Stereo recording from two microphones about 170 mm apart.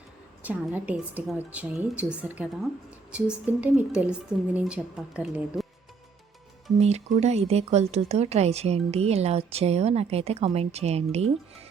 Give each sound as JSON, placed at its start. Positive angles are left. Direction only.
{"t": 0.4, "sound": "a woman's voice", "side_deg": -10}
{"t": 6.7, "sound": "speech", "side_deg": -40}